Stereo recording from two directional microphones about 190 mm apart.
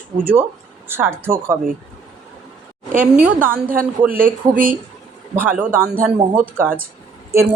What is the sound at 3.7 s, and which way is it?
Speech, 45° right (ahead or behind).